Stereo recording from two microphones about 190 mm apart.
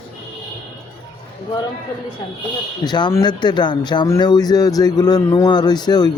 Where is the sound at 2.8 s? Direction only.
20° left (ahead or behind).